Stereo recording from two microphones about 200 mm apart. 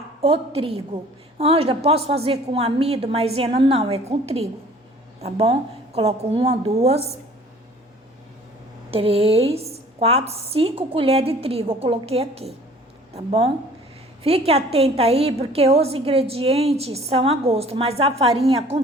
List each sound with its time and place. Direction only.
0.2 s a woman's voice: 30° right (ahead or behind)
8.9 s a woman's voice: 30° right (ahead or behind)